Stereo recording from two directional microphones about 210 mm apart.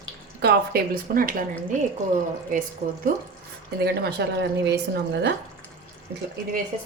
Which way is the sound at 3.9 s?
50° right (ahead or behind).